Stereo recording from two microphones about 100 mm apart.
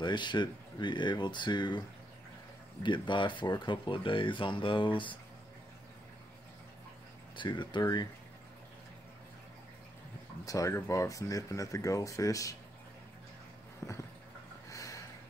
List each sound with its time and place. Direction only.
0.0 s speech: 50° left (ahead or behind)
2.8 s speech: 50° left (ahead or behind)
7.3 s speech: 50° left (ahead or behind)
10.4 s speech: 35° left (ahead or behind)
13.8 s a sound: 30° left (ahead or behind)